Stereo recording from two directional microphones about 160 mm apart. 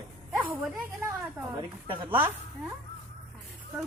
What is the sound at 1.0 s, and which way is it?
A woman's voice, 20° right (ahead or behind).